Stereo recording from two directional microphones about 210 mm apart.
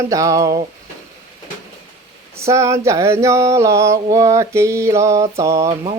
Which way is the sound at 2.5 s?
15° right (ahead or behind).